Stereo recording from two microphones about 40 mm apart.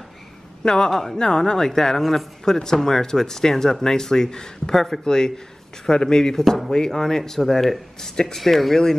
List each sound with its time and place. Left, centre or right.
0.7 s a woman's voice: centre